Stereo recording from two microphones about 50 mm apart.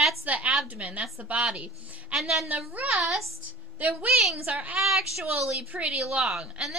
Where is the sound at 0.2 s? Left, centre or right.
Right.